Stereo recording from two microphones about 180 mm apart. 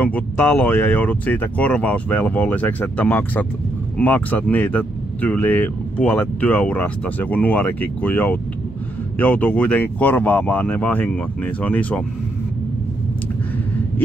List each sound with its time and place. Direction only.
0.0 s speech: 10° left (ahead or behind)